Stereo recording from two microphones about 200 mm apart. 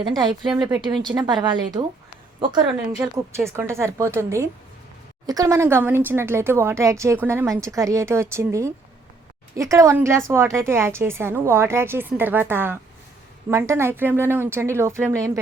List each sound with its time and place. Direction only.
0.0 s speech: 20° right (ahead or behind)
2.6 s speech: 10° right (ahead or behind)